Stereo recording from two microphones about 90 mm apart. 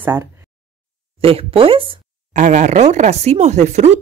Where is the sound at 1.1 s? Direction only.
90° right.